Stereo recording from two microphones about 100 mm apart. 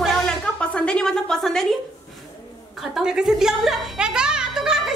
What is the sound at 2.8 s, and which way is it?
A woman's voice, 5° right (ahead or behind).